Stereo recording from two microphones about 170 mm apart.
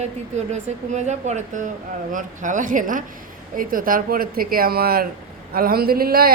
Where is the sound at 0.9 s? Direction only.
45° right (ahead or behind).